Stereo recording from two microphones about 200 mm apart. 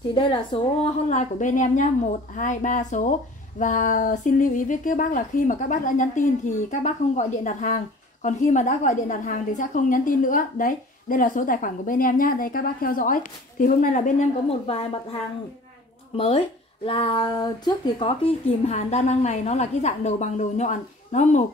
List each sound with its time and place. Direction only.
0.1 s a woman's voice: 25° left (ahead or behind)
18.7 s a woman's voice: 35° left (ahead or behind)